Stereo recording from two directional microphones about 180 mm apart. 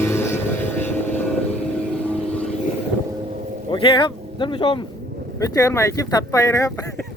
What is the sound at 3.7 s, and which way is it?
Speech, 25° left (ahead or behind).